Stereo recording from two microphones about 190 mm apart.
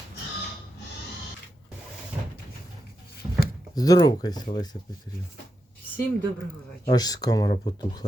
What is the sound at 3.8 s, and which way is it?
Speech, 20° left (ahead or behind).